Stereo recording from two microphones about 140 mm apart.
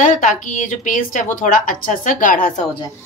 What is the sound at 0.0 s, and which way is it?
A woman's voice, 60° left (ahead or behind).